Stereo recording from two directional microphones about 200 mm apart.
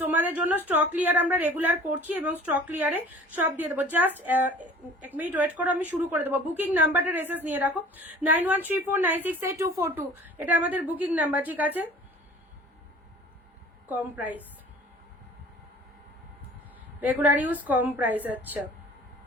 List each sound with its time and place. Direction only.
0.0 s a sound: 10° right (ahead or behind)
0.8 s a woman's voice: 10° right (ahead or behind)
13.8 s a woman's voice: 10° right (ahead or behind)
17.0 s a woman's voice: 10° right (ahead or behind)